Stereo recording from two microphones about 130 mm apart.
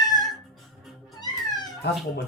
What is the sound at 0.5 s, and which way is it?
Music, centre (ahead or behind).